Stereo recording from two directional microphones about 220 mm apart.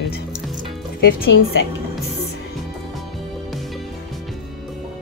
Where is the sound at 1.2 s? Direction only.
50° left (ahead or behind).